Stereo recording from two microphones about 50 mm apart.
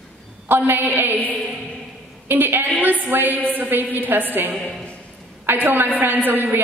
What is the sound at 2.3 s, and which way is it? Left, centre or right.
A man's voice, right.